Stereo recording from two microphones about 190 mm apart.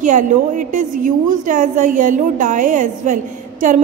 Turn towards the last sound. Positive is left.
turn(degrees=-40)  # may be behind; listen again after turning